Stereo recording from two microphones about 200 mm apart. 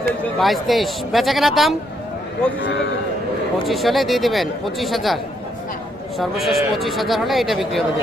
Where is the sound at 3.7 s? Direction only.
Centre (ahead or behind).